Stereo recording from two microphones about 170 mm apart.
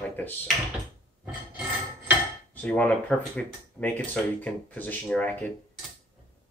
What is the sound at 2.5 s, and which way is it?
Speech, 10° left (ahead or behind).